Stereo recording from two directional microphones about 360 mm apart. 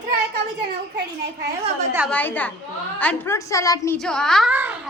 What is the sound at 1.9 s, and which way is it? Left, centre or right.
A woman's voice, centre.